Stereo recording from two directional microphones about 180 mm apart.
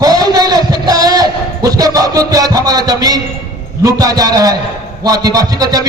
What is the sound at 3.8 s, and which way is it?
A man's voice, 20° right (ahead or behind).